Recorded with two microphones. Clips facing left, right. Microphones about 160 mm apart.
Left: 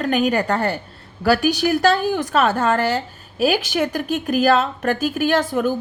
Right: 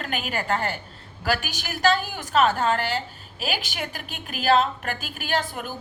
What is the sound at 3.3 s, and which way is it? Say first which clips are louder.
Speech: left 12 dB; 45° left (ahead or behind).